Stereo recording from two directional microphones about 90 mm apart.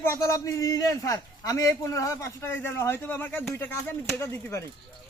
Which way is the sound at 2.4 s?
25° left (ahead or behind).